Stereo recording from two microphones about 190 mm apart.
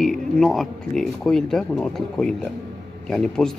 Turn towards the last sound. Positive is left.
turn(degrees=5)  # may be behind; listen again after turning